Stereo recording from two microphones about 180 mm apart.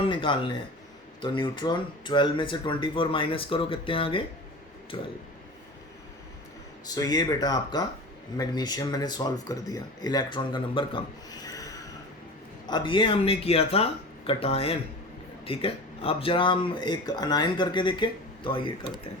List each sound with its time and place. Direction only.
0.1 s a sound: 25° left (ahead or behind)
1.2 s speech: 25° left (ahead or behind)
6.8 s speech: 20° left (ahead or behind)